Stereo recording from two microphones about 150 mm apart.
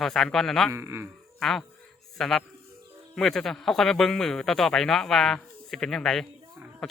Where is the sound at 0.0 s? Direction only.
5° left (ahead or behind).